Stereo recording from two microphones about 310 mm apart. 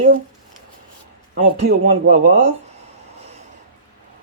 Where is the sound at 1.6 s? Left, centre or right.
Right.